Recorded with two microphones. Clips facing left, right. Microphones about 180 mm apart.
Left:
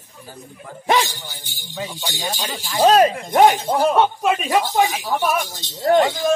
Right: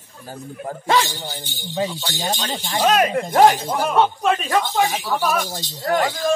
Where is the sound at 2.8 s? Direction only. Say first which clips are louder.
Left 4 dB; 35° left (ahead or behind).